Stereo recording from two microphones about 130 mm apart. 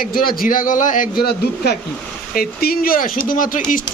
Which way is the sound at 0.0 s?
90° left.